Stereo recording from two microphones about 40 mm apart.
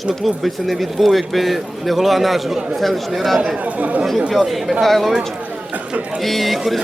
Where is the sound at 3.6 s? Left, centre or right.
Right.